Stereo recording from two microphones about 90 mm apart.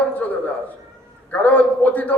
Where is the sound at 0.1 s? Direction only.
20° left (ahead or behind).